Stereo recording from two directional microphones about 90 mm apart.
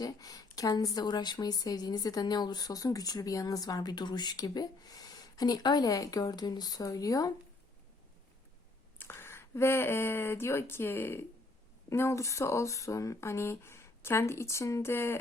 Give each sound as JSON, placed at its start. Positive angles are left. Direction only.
{"t": 0.0, "sound": "a woman's voice", "side_deg": 45}
{"t": 9.0, "sound": "speech", "side_deg": 25}